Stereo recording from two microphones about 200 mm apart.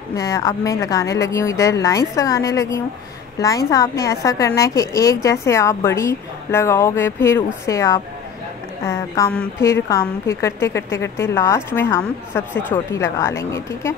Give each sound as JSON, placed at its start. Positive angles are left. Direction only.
{"t": 0.1, "sound": "a woman's voice", "side_deg": 15}